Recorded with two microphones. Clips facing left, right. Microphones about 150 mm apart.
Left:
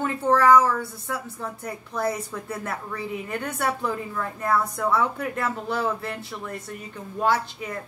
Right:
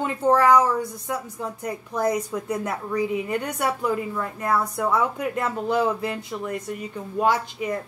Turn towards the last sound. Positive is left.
turn(degrees=-15)  # may be behind; listen again after turning